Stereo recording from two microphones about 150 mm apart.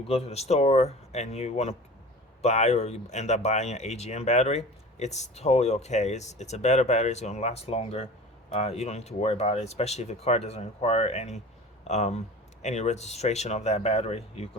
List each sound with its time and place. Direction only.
0.1 s speech: 45° left (ahead or behind)